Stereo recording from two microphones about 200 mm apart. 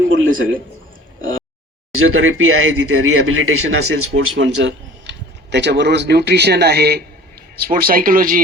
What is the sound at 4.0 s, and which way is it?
Speech, 80° right.